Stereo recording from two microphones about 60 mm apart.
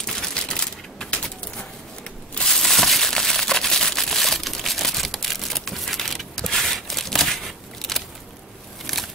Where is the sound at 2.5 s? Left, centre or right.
Centre.